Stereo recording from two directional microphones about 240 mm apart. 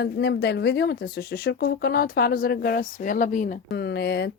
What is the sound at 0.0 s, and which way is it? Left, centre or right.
Speech, left.